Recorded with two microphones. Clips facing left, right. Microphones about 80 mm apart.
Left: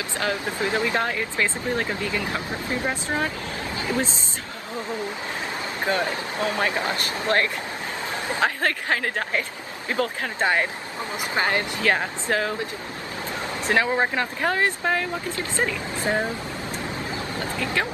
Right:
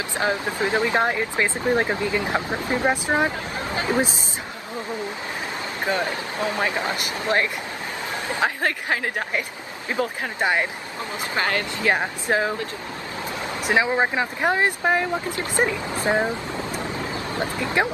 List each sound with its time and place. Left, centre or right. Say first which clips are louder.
0.2 s speech: right 3 dB; right
5.9 s speech: even; right
11.3 s speech: even; left
11.8 s speech: right 1 dB; right
13.7 s speech: right 1 dB; centre
17.4 s speech: right 4 dB; right